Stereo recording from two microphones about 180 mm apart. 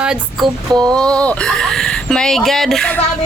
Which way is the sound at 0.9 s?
5° left (ahead or behind).